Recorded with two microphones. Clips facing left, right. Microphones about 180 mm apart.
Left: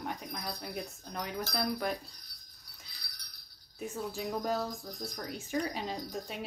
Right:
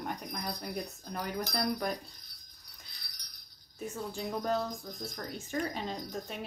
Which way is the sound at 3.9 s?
5° left (ahead or behind).